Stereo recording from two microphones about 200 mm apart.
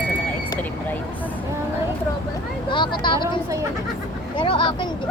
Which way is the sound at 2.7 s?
25° left (ahead or behind).